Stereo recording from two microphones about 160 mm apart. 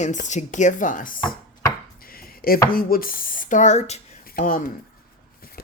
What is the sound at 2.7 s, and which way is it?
Speech, 65° left (ahead or behind).